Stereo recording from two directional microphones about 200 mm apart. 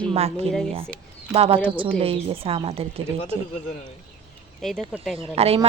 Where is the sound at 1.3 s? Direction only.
30° right (ahead or behind).